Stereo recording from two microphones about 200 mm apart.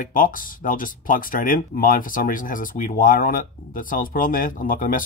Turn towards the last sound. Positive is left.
turn(degrees=45)  # may be behind; listen again after turning